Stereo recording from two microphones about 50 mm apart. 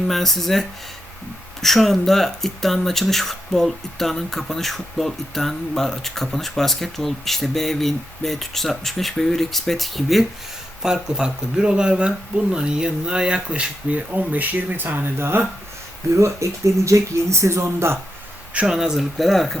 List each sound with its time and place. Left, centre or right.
0.1 s speech: centre
1.6 s speech: centre
10.8 s speech: centre; by 15.4 s right
16.1 s speech: right
18.6 s speech: centre
18.9 s speech: centre